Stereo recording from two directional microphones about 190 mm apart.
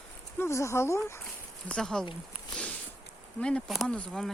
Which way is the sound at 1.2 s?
5° left (ahead or behind).